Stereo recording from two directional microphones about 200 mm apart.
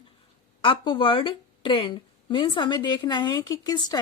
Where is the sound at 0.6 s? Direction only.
25° left (ahead or behind).